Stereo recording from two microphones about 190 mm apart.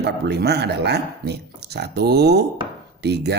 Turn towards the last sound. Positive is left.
turn(degrees=-60)  # may be behind; listen again after turning